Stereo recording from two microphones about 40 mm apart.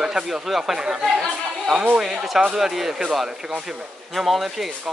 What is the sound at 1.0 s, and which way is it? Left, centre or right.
Chatter, centre.